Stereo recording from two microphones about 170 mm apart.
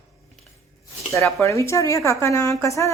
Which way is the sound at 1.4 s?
15° left (ahead or behind).